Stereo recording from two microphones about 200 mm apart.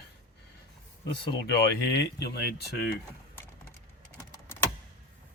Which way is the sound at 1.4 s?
50° left (ahead or behind).